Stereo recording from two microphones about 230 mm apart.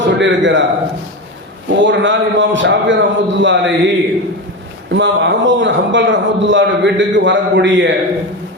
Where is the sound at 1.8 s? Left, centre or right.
Right.